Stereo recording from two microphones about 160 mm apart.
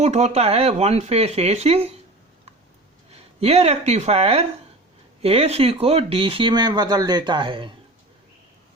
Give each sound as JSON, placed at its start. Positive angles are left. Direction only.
{"t": 0.0, "sound": "speech", "side_deg": -45}
{"t": 3.4, "sound": "speech", "side_deg": -40}